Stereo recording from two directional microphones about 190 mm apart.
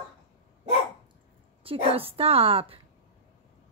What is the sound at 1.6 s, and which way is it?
A woman's voice, 30° right (ahead or behind).